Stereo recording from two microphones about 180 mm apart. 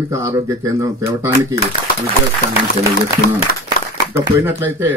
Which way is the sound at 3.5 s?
55° left (ahead or behind).